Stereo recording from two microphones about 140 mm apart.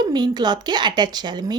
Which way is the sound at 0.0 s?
30° right (ahead or behind).